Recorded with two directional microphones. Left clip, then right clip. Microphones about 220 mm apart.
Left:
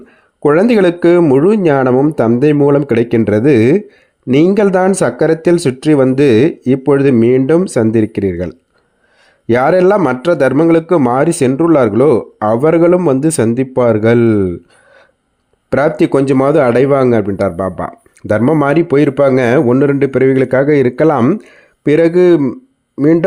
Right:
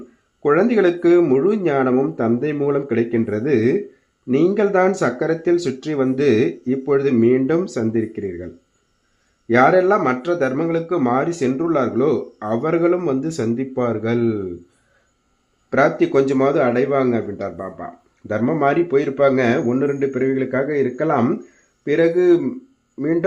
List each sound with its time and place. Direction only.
0.4 s speech: 45° left (ahead or behind)
9.5 s speech: 45° left (ahead or behind)
15.7 s speech: 45° left (ahead or behind)